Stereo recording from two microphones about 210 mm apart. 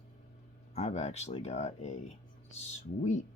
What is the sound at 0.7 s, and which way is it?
Speech, 30° left (ahead or behind).